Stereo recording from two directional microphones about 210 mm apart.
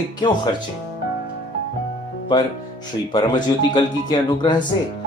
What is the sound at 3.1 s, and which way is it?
Speech, 20° left (ahead or behind).